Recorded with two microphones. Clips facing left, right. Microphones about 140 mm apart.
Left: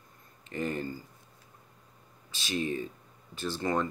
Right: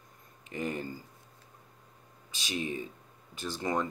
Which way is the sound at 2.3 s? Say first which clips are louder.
Left 3 dB; 15° right (ahead or behind).